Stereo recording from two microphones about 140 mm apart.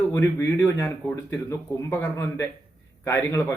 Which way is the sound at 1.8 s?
20° left (ahead or behind).